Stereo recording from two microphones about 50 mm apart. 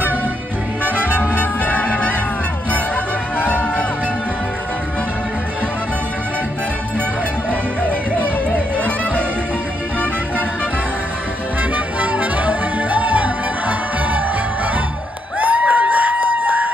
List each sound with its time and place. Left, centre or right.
0.8 s music: right
1.4 s music: left
3.3 s music: left
8.7 s music: left
11.7 s music: right
15.4 s a sound: right